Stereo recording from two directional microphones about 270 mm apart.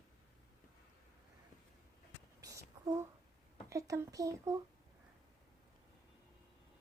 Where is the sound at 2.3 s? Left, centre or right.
Centre.